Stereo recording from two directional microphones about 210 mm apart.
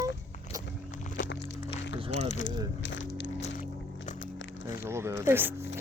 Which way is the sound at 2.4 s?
60° left (ahead or behind).